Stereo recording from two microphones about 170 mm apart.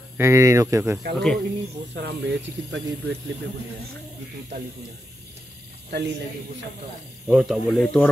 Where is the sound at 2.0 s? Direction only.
90° right.